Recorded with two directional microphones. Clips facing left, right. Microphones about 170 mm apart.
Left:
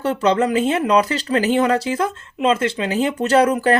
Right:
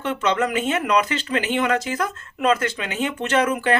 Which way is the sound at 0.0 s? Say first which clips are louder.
Left 5 dB; 35° left (ahead or behind).